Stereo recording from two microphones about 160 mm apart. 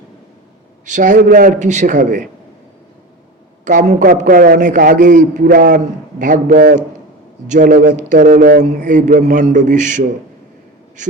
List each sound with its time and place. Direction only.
0.9 s a man's voice: 50° right (ahead or behind)
3.6 s a man's voice: 50° right (ahead or behind)